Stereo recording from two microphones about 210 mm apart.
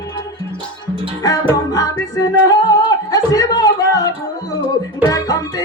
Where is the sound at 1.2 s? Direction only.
15° left (ahead or behind).